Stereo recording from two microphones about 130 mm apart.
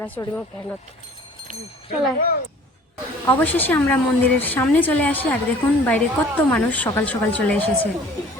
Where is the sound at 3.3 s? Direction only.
15° left (ahead or behind).